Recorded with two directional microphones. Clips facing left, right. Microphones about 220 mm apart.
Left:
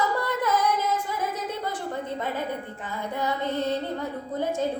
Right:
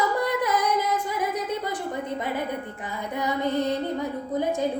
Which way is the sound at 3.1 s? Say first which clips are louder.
Right 3 dB; 15° right (ahead or behind).